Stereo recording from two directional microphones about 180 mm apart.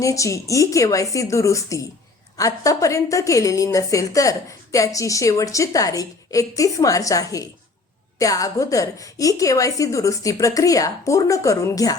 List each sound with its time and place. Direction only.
0.0 s a woman's voice: 15° left (ahead or behind)